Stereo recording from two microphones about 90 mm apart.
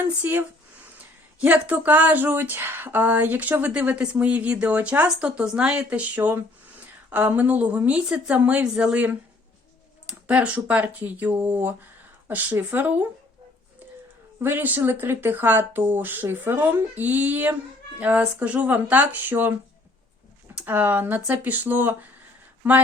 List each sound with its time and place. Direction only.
0.0 s speech: 25° right (ahead or behind)
14.4 s speech: 20° right (ahead or behind)
20.6 s speech: 20° right (ahead or behind)